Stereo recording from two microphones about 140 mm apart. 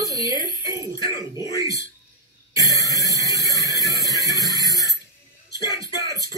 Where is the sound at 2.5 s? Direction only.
25° right (ahead or behind).